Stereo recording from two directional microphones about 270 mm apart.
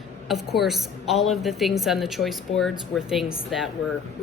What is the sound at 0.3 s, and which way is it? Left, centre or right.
Speech, centre.